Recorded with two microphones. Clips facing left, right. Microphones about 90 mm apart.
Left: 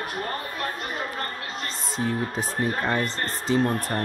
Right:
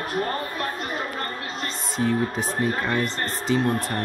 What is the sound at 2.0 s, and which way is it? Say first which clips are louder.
Speech: right 4 dB; 25° left (ahead or behind).